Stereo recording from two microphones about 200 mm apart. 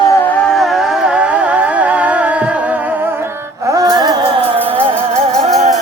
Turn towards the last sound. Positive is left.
turn(degrees=-35)  # may be behind; listen again after turning